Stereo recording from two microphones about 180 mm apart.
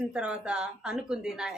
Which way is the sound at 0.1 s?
5° right (ahead or behind).